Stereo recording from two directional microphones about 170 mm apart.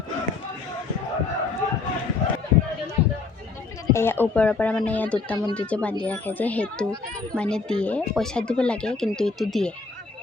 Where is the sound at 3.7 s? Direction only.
15° left (ahead or behind).